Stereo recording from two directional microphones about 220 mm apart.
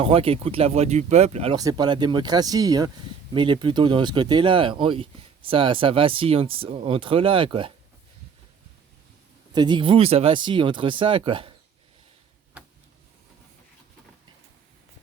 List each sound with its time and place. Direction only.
0.0 s speech: 25° right (ahead or behind)
9.5 s speech: 20° right (ahead or behind)